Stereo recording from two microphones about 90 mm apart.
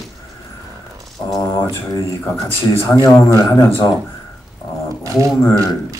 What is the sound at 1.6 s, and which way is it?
A woman's voice, 30° left (ahead or behind).